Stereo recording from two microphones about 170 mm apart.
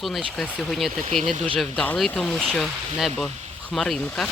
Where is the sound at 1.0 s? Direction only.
40° right (ahead or behind).